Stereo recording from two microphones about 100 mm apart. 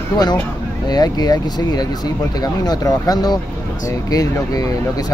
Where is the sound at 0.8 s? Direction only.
40° left (ahead or behind).